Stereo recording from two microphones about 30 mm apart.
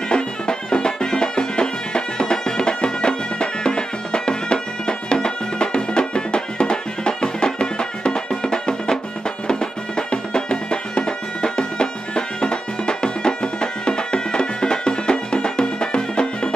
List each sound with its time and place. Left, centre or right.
0.1 s music: left